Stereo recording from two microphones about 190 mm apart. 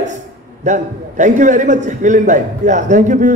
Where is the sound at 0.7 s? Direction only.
40° right (ahead or behind).